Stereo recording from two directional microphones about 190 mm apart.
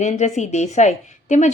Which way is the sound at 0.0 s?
35° left (ahead or behind).